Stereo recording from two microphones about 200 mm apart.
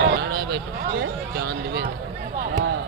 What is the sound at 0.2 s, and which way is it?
Speech, 50° right (ahead or behind).